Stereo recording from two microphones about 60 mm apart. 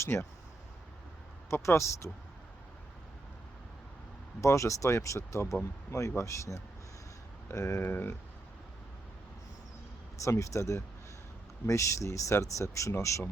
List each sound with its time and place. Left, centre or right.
0.0 s speech: left
1.5 s speech: left
4.4 s speech: left
10.2 s speech: left